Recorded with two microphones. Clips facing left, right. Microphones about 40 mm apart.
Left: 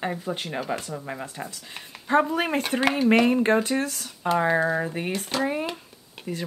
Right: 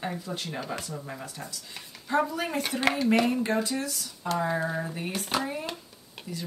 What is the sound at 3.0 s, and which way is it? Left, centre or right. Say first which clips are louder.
Speech: left 5 dB; left.